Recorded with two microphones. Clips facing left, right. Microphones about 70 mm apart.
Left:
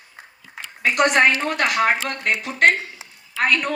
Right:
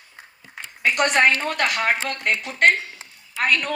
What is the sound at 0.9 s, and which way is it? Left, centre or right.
Speech, left.